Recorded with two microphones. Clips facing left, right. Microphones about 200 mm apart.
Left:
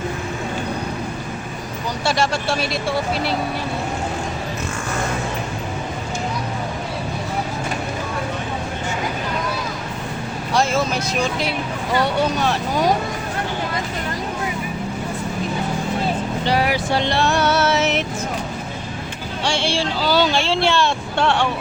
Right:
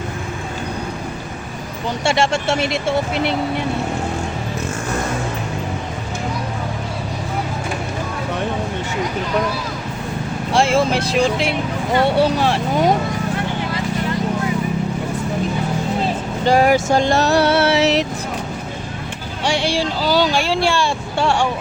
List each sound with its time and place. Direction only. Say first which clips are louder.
2.0 s speech: right 3 dB; 25° right (ahead or behind)
10.5 s speech: right 4 dB; 30° right (ahead or behind)
16.4 s vehicle: right 8 dB; 45° right (ahead or behind)
20.0 s speech: even; 15° right (ahead or behind)